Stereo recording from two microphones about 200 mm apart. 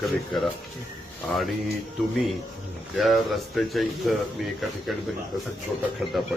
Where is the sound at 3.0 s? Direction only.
Centre (ahead or behind).